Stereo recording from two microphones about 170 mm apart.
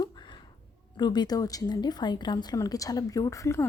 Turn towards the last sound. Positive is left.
turn(degrees=15)  # may be behind; listen again after turning